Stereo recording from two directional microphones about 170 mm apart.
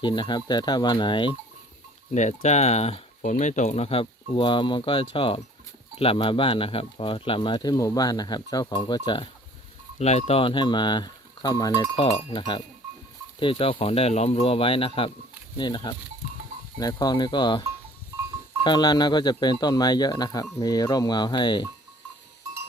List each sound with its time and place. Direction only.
0.0 s speech: 25° left (ahead or behind)
2.1 s speech: 45° left (ahead or behind)
10.0 s speech: 40° left (ahead or behind); by 12.0 s 25° left (ahead or behind)
12.0 s speech: 35° left (ahead or behind)
18.6 s speech: 25° left (ahead or behind)